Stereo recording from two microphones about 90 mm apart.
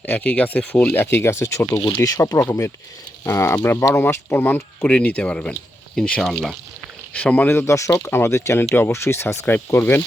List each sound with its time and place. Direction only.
0.0 s speech: 20° left (ahead or behind); by 2.4 s 45° left (ahead or behind)
3.2 s speech: 30° left (ahead or behind)